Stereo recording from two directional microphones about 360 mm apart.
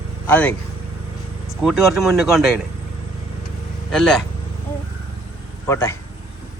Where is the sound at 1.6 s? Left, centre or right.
Centre.